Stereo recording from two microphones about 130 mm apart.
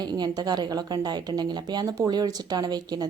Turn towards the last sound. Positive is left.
turn(degrees=-30)  # may be behind; listen again after turning